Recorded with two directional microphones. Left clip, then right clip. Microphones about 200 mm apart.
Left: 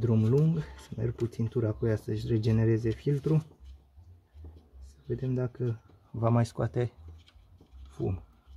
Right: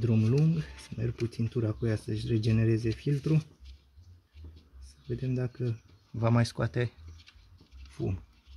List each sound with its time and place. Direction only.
0.0 s speech: 10° right (ahead or behind)
5.1 s speech: 10° right (ahead or behind)
6.1 s speech: 25° right (ahead or behind)
7.9 s a sound: 15° right (ahead or behind)